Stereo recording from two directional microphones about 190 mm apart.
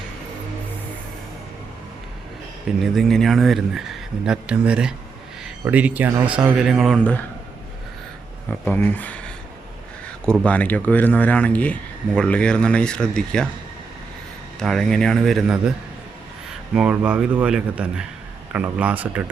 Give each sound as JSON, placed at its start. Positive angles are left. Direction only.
{"t": 2.8, "sound": "speech", "side_deg": 0}
{"t": 8.6, "sound": "speech", "side_deg": 10}
{"t": 14.6, "sound": "speech", "side_deg": 0}
{"t": 16.7, "sound": "speech", "side_deg": -5}